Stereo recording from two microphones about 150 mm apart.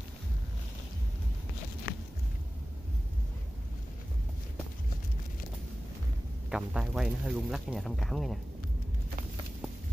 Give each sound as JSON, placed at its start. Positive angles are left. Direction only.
{"t": 6.5, "sound": "speech", "side_deg": -5}